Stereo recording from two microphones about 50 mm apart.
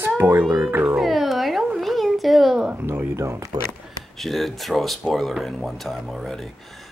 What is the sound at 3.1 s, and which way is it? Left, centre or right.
Speech, right.